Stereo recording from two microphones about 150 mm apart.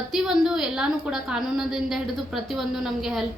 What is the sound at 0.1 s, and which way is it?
A woman's voice, 5° right (ahead or behind).